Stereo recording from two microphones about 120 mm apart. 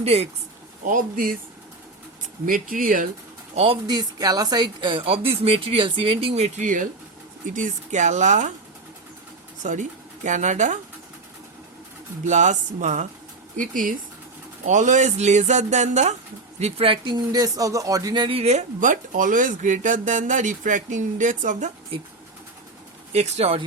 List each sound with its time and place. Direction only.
0.0 s speech: 60° right (ahead or behind)
2.5 s speech: 90° right
3.5 s speech: 60° right (ahead or behind)
3.8 s speech: 35° right (ahead or behind); by 8.5 s 90° right
10.2 s speech: 90° right
12.2 s speech: 90° right
14.6 s speech: 90° right
16.6 s speech: 60° right (ahead or behind); by 18.1 s 30° right (ahead or behind)
18.1 s speech: 45° right (ahead or behind)
18.4 s speech: 85° right
23.1 s speech: 65° right (ahead or behind)